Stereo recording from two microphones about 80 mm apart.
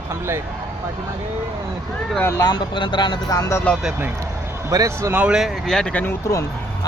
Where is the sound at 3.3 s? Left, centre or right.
Left.